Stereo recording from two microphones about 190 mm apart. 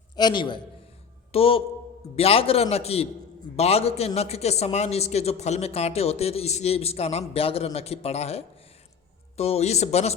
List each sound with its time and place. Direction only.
0.2 s a man's voice: 25° left (ahead or behind)